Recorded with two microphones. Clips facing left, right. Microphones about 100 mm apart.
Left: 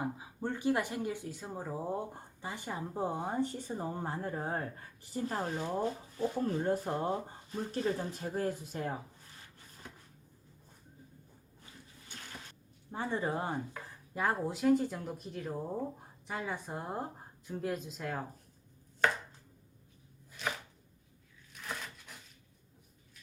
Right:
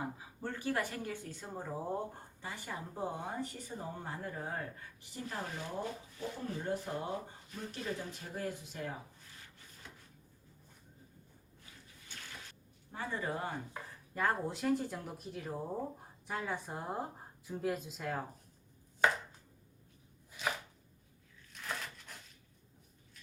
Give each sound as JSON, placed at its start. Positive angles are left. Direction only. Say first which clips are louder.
{"t": 0.0, "sound": "speech", "louder": "left 4 dB", "side_deg": 15}
{"t": 2.4, "sound": "speech", "louder": "left 4 dB", "side_deg": 20}
{"t": 12.9, "sound": "speech", "louder": "left 4 dB", "side_deg": 25}
{"t": 14.1, "sound": "speech", "louder": "left 1 dB", "side_deg": 15}
{"t": 14.4, "sound": "speech", "louder": "left 5 dB", "side_deg": 0}
{"t": 19.0, "sound": "chopping", "louder": "even", "side_deg": -15}
{"t": 20.4, "sound": "chopping", "louder": "even", "side_deg": 0}
{"t": 21.5, "sound": "a sound", "louder": "even", "side_deg": 5}